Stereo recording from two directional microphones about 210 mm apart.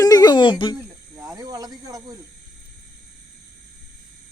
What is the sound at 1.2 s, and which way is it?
Speech, 15° right (ahead or behind).